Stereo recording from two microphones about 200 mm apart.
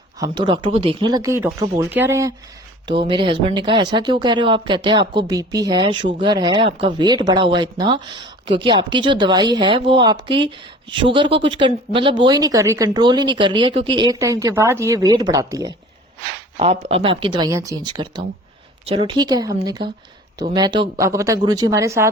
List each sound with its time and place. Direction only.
0.2 s speech: 20° right (ahead or behind)
2.8 s speech: 25° right (ahead or behind)
16.6 s speech: 30° right (ahead or behind); by 22.1 s 15° right (ahead or behind)